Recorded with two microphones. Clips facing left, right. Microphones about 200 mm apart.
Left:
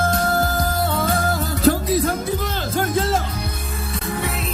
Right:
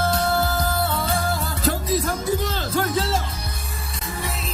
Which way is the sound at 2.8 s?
50° left (ahead or behind).